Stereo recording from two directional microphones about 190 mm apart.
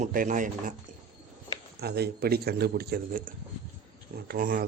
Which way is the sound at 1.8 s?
60° right (ahead or behind).